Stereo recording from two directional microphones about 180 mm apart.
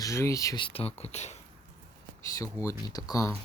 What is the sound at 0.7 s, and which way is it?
Speech, 35° left (ahead or behind).